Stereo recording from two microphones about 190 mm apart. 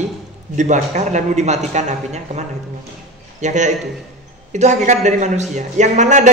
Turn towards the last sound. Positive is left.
turn(degrees=-40)  # may be behind; listen again after turning